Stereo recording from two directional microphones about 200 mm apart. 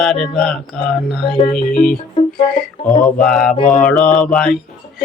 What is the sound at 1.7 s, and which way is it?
Music, 45° left (ahead or behind).